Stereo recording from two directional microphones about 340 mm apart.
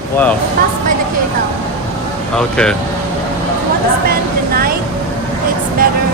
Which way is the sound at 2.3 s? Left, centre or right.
Centre.